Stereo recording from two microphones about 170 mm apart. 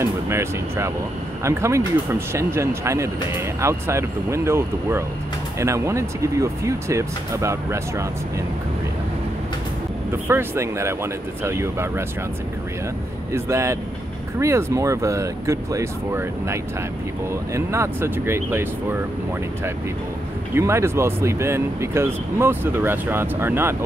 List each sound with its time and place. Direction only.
0.0 s speech: 15° right (ahead or behind)
10.2 s speech: 15° right (ahead or behind)
13.3 s speech: 15° right (ahead or behind)
20.5 s speech: 15° right (ahead or behind)